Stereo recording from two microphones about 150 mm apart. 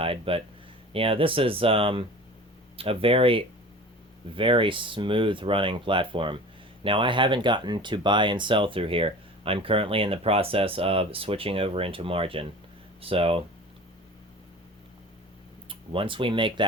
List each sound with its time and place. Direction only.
0.0 s speech: 35° right (ahead or behind)
15.7 s speech: 35° right (ahead or behind)